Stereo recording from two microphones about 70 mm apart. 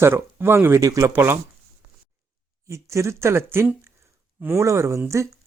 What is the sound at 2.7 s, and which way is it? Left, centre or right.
Speech, right.